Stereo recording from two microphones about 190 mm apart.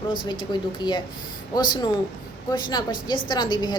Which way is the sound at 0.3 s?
25° left (ahead or behind).